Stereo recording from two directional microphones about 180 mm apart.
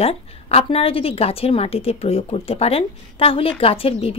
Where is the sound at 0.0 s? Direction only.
35° left (ahead or behind).